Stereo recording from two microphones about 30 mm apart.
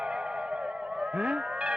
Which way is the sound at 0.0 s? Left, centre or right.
Right.